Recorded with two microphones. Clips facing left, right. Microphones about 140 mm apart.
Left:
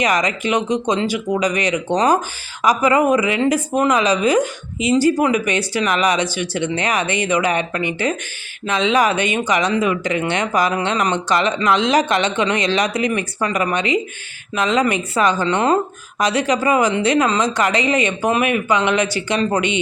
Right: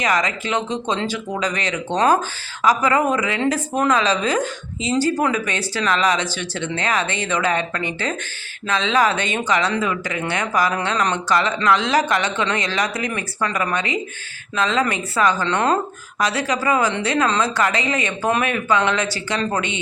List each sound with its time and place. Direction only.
0.0 s a woman's voice: 20° left (ahead or behind)